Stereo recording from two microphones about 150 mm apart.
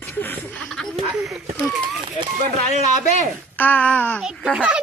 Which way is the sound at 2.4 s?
50° right (ahead or behind).